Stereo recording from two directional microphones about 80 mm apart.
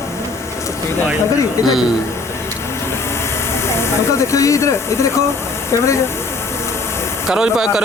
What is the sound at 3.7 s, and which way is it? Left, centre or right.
Speech, left.